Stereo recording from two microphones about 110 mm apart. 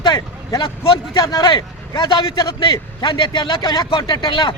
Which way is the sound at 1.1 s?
35° left (ahead or behind).